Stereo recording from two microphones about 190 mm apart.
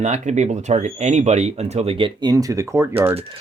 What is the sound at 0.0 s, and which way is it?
Speech, 40° right (ahead or behind).